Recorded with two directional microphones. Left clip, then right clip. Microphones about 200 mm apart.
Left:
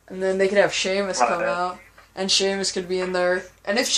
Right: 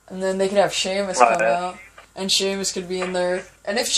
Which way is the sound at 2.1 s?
25° left (ahead or behind).